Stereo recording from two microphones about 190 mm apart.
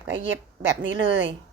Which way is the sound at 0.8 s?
75° right (ahead or behind).